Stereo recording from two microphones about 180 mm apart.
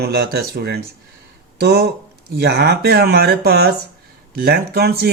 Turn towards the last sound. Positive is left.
turn(degrees=-60)  # may be behind; listen again after turning